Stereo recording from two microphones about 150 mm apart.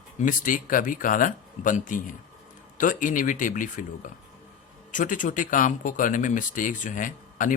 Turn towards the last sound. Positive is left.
turn(degrees=60)  # may be behind; listen again after turning